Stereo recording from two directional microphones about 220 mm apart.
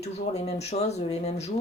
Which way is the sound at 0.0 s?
30° left (ahead or behind).